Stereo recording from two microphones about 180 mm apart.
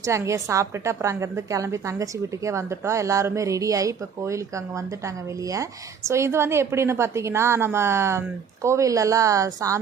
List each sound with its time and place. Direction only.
0.0 s a woman's voice: 15° right (ahead or behind)